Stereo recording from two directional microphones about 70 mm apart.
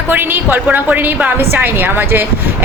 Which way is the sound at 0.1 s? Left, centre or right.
Right.